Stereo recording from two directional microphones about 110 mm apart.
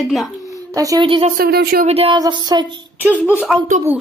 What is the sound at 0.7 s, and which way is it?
Speech, 30° right (ahead or behind).